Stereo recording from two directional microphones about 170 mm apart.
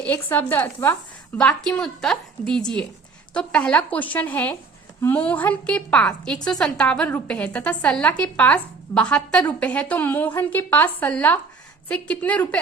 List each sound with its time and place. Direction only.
0.0 s a woman's voice: 10° left (ahead or behind)